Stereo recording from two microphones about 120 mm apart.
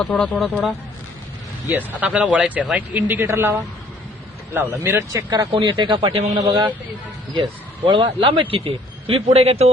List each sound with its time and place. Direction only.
0.0 s speech: 5° left (ahead or behind)
1.6 s speech: 15° right (ahead or behind)
5.5 s a man's voice: 40° right (ahead or behind)
6.3 s a man's voice: 40° right (ahead or behind)
7.9 s a man's voice: 40° right (ahead or behind); by 9.6 s 60° right (ahead or behind)